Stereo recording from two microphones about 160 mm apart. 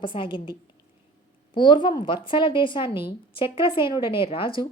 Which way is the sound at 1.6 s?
30° left (ahead or behind).